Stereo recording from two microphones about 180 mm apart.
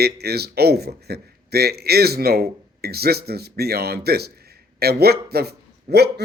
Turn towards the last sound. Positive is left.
turn(degrees=-65)  # may be behind; listen again after turning